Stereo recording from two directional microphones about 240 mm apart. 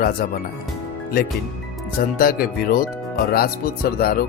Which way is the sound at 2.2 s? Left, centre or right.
Left.